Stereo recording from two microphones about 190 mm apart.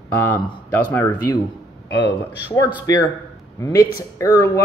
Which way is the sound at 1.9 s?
65° left (ahead or behind).